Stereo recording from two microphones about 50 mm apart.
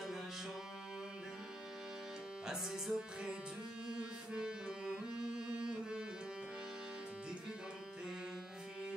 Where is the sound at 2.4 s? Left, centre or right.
Centre.